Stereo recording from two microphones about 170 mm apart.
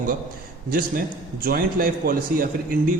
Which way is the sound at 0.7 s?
60° right (ahead or behind).